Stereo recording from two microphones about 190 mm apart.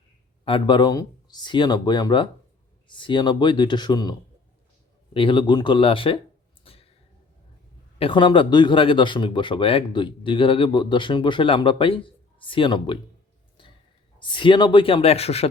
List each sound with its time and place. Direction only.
0.4 s speech: 25° left (ahead or behind)
5.1 s speech: 25° left (ahead or behind)
6.7 s a sound: 30° left (ahead or behind)
7.9 s speech: 30° left (ahead or behind)
14.2 s speech: 25° left (ahead or behind)